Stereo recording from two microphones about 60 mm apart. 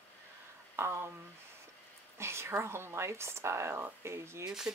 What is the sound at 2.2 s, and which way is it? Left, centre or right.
Speech, right.